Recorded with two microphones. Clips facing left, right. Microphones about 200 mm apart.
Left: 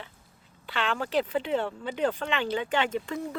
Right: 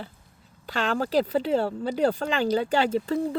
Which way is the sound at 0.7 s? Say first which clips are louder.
Right 4 dB; 40° right (ahead or behind).